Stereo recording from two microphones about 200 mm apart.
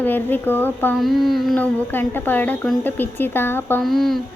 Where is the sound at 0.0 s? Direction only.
10° left (ahead or behind).